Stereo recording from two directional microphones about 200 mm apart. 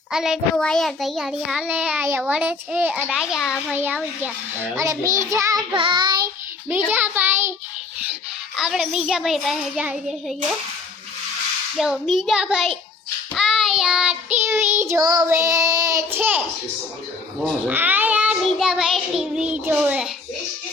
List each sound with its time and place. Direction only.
0.1 s a child's voice: 5° right (ahead or behind)
4.8 s child singing: 15° right (ahead or behind)
6.8 s child singing: 10° right (ahead or behind)
8.5 s a child's voice: centre (ahead or behind)
11.8 s a child's voice: centre (ahead or behind)
13.3 s child singing: centre (ahead or behind)
17.7 s child singing: 10° right (ahead or behind)